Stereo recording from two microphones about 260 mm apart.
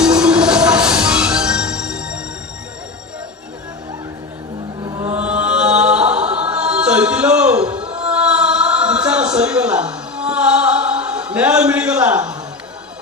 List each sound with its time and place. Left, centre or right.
0.2 s music: centre
4.8 s chant: centre
6.4 s music: centre
7.9 s a sound: centre